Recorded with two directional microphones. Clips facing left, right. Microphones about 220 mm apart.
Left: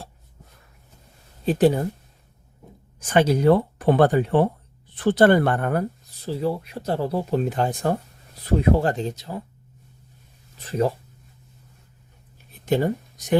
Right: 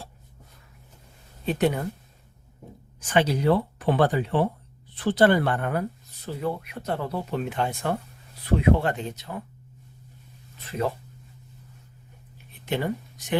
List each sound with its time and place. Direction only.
1.5 s speech: 35° left (ahead or behind)
3.1 s speech: 45° left (ahead or behind)
6.2 s speech: 30° left (ahead or behind)
10.6 s speech: 40° left (ahead or behind)
12.5 s a sound: 40° left (ahead or behind)